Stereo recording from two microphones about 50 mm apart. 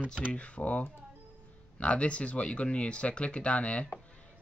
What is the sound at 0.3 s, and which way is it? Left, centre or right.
Speech, left.